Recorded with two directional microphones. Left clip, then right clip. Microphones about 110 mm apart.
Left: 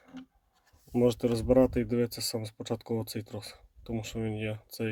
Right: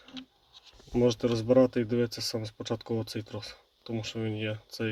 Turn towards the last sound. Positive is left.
turn(degrees=25)  # may be behind; listen again after turning